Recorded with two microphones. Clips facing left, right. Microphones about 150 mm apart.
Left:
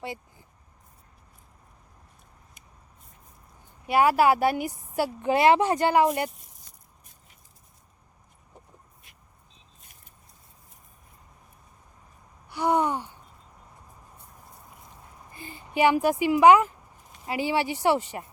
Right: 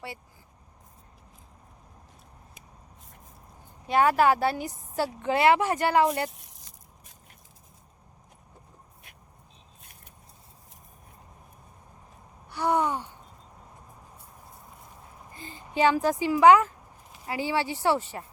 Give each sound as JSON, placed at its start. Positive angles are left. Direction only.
{"t": 3.8, "sound": "speech", "side_deg": 10}
{"t": 12.5, "sound": "gasp", "side_deg": 15}
{"t": 15.7, "sound": "speech", "side_deg": 15}